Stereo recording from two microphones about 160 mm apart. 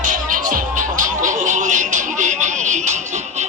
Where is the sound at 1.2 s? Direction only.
50° right (ahead or behind).